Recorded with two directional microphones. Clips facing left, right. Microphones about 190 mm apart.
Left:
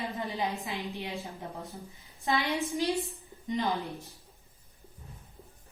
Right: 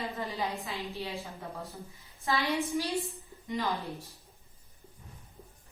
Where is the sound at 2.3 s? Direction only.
20° left (ahead or behind).